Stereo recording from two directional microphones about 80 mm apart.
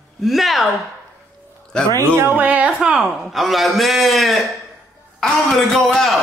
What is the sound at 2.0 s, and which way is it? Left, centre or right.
Speech, right.